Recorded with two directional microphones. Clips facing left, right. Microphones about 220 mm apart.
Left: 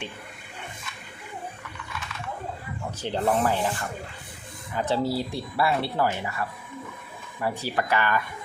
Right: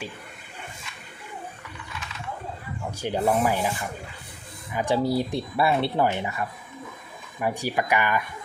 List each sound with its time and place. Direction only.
3.0 s rub: 10° right (ahead or behind)
4.7 s speech: 15° right (ahead or behind)
7.3 s rub: 15° right (ahead or behind)